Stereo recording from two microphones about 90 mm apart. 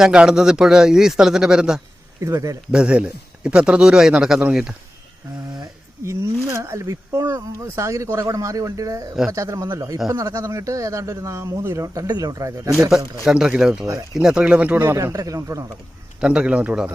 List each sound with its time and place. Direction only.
0.0 s a man's voice: 5° right (ahead or behind)
2.2 s speech: 35° right (ahead or behind)
2.7 s a man's voice: 10° right (ahead or behind)
6.1 s speech: 35° right (ahead or behind)
12.7 s a man's voice: 5° right (ahead or behind); by 14.9 s 20° right (ahead or behind)
14.9 s speech: 35° right (ahead or behind)
16.2 s a man's voice: 10° right (ahead or behind)